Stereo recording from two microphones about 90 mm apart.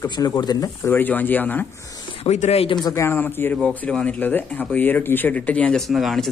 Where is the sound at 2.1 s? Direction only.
90° left.